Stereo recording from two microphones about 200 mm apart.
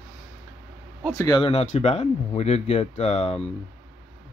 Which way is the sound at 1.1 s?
20° left (ahead or behind).